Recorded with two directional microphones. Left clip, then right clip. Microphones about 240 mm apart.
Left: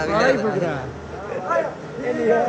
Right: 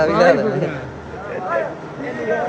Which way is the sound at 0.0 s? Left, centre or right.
Centre.